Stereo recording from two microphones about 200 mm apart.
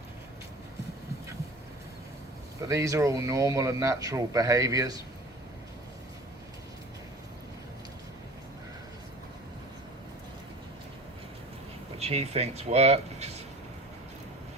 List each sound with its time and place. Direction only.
2.6 s speech: 15° right (ahead or behind)
11.9 s speech: 30° right (ahead or behind)